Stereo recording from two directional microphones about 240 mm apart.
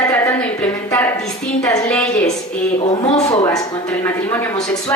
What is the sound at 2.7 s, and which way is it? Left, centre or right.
A woman's voice, left.